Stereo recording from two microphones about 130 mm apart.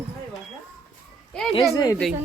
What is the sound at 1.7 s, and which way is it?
Speech, 25° left (ahead or behind).